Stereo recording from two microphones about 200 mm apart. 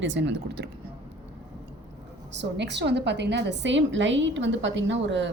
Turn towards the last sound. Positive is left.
turn(degrees=-65)  # may be behind; listen again after turning